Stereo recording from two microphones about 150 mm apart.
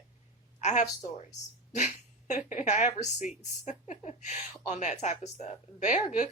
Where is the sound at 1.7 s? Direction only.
55° left (ahead or behind).